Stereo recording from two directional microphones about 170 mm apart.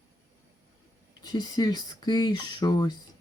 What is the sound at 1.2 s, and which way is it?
Speech, 25° left (ahead or behind).